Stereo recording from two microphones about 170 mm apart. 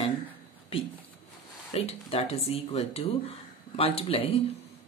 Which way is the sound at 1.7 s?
35° left (ahead or behind).